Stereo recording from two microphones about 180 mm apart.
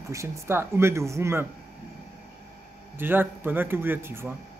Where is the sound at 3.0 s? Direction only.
10° right (ahead or behind).